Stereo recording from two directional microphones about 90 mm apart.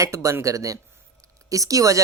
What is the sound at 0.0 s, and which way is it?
Speech, 35° right (ahead or behind).